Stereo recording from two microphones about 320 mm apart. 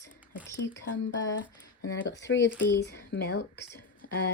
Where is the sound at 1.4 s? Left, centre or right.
Left.